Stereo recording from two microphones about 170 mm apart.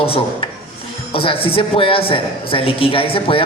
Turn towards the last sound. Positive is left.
turn(degrees=30)  # may be behind; listen again after turning